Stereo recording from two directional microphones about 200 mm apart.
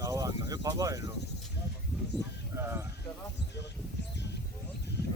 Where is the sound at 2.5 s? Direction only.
10° right (ahead or behind).